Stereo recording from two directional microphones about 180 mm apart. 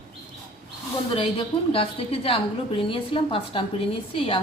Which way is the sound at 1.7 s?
30° left (ahead or behind).